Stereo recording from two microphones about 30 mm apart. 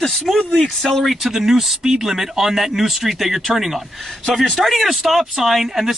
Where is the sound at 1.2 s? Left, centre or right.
Centre.